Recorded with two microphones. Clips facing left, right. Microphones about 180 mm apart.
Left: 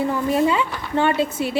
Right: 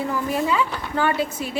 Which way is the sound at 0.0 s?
25° left (ahead or behind).